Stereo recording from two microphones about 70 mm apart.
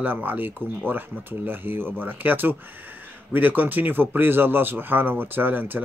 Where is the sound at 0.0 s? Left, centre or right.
Right.